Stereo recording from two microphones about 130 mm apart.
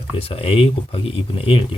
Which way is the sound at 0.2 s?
45° left (ahead or behind).